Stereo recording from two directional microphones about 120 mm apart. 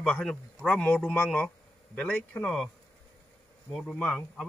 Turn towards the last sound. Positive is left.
turn(degrees=0)  # may be behind; listen again after turning